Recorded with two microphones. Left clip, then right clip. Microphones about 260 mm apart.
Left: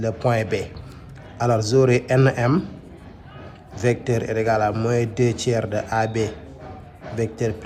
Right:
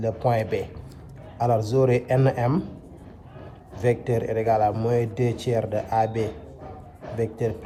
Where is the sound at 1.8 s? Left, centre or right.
Centre.